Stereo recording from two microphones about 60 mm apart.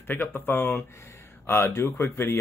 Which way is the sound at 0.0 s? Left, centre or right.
Left.